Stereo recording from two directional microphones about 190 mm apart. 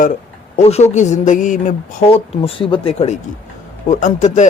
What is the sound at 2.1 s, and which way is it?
Speech, 30° left (ahead or behind).